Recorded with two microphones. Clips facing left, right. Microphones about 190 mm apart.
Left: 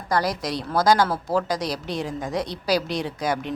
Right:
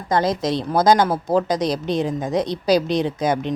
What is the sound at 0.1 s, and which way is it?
A woman's voice, 20° right (ahead or behind).